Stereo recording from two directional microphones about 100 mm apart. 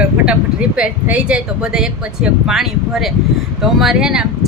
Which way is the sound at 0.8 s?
10° right (ahead or behind).